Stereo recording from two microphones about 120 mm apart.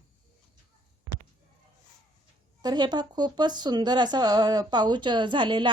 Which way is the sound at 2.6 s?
35° right (ahead or behind).